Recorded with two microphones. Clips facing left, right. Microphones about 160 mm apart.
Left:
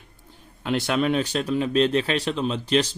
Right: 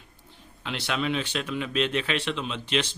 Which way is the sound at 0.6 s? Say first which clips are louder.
Left 7 dB; 45° left (ahead or behind).